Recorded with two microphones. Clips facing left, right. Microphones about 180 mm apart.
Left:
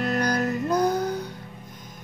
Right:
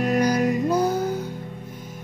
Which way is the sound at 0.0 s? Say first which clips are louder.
Right 4 dB; 10° right (ahead or behind).